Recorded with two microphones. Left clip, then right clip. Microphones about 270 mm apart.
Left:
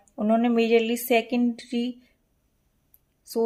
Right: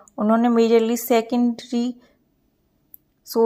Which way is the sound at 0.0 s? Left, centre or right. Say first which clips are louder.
Right 4 dB; centre.